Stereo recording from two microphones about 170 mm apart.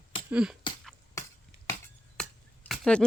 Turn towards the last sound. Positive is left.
turn(degrees=5)  # may be behind; listen again after turning